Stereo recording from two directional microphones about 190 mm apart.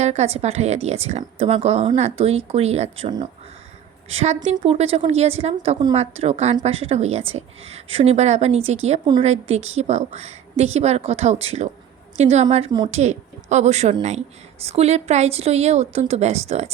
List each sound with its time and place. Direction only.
0.0 s speech: 35° right (ahead or behind)
4.1 s a woman's voice: 35° right (ahead or behind)